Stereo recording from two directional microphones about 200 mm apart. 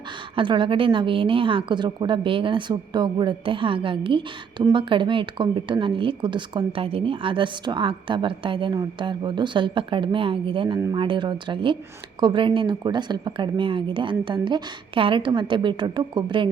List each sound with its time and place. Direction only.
0.3 s a woman's voice: 25° right (ahead or behind)